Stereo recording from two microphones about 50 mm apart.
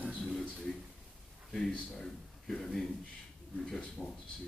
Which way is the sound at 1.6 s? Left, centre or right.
Centre.